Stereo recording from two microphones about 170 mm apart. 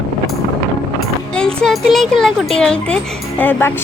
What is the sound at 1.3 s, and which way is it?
Speech, 5° left (ahead or behind).